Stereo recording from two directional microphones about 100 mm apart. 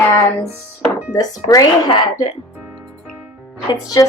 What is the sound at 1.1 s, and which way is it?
Speech, 35° left (ahead or behind).